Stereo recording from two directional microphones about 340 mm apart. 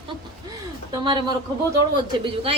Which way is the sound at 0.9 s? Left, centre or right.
Centre.